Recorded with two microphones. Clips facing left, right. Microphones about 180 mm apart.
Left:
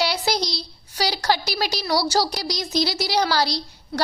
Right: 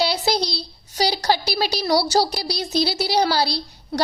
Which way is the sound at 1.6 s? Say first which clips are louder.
Right 3 dB; 15° right (ahead or behind).